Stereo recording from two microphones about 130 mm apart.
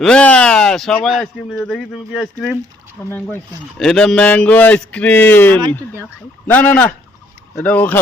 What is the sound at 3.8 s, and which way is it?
Speech, 5° left (ahead or behind).